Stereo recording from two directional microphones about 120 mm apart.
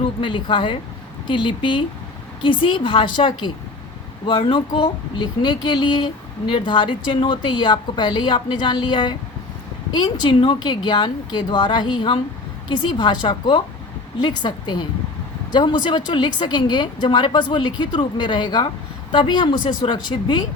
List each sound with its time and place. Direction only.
0.0 s a woman's voice: 45° left (ahead or behind)